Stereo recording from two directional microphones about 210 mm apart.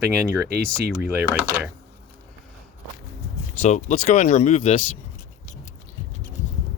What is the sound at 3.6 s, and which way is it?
Speech, 35° left (ahead or behind).